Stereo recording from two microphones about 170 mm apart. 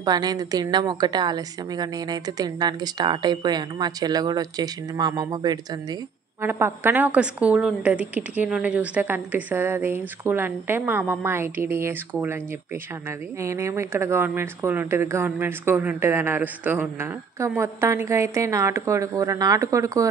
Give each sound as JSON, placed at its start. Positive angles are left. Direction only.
{"t": 0.0, "sound": "a woman's voice", "side_deg": -25}
{"t": 6.4, "sound": "speech", "side_deg": -15}
{"t": 13.4, "sound": "speech", "side_deg": -15}